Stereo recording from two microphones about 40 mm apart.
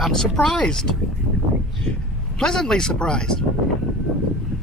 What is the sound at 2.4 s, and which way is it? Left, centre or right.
Speech, centre.